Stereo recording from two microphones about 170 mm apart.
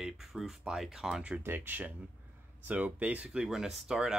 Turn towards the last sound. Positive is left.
turn(degrees=-5)  # may be behind; listen again after turning